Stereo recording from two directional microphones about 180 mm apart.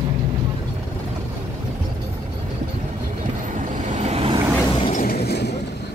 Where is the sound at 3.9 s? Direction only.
40° right (ahead or behind).